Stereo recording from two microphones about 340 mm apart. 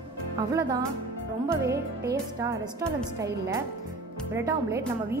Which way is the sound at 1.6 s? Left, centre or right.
Right.